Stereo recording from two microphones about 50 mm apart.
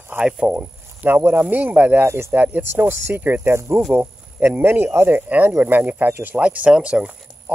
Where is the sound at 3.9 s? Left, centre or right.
Right.